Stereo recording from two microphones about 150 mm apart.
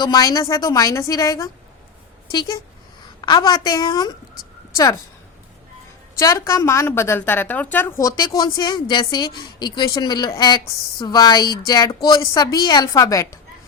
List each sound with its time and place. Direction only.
0.0 s a woman's voice: 25° left (ahead or behind)
6.1 s a woman's voice: 20° left (ahead or behind)